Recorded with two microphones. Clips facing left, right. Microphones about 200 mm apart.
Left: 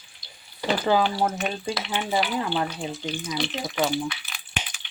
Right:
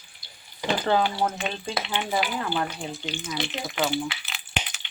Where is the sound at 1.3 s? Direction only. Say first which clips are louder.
Left 2 dB; 25° right (ahead or behind).